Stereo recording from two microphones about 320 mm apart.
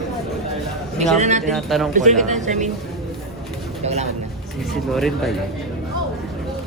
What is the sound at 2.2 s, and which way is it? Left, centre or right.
Speech, right.